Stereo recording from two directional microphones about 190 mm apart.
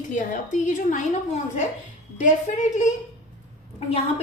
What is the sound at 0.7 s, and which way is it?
Speech, 40° left (ahead or behind).